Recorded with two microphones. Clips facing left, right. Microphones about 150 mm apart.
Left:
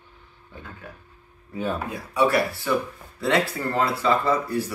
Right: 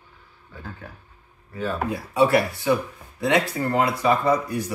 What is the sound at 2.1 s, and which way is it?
Speech, 25° right (ahead or behind).